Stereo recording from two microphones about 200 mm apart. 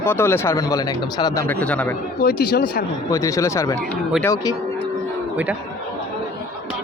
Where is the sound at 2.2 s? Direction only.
50° left (ahead or behind).